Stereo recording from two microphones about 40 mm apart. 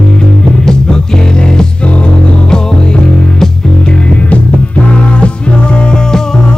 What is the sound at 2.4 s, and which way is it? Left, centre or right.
Music, centre.